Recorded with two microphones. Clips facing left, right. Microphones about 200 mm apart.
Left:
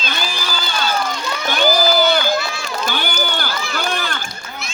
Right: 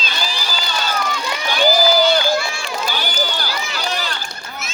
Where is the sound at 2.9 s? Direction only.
55° left (ahead or behind).